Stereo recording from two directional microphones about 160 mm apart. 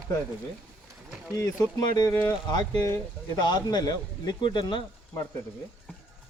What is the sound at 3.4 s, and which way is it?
A man's voice, 25° left (ahead or behind).